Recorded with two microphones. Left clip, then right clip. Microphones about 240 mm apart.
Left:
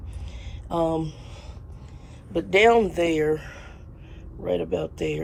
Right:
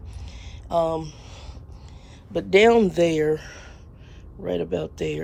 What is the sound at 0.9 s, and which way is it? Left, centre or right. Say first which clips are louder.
Speech: left 1 dB; centre.